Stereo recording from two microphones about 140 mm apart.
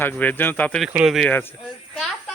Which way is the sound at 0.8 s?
5° right (ahead or behind).